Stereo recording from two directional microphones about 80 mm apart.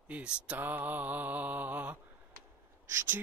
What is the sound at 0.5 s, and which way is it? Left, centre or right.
Mantra, right.